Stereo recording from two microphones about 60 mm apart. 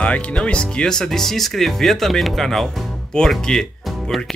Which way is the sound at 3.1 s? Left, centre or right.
Centre.